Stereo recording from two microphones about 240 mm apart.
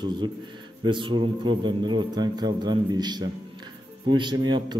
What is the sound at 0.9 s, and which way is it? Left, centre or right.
A man's voice, centre.